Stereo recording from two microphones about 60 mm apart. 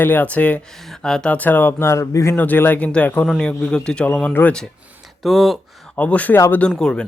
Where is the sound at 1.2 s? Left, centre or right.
Left.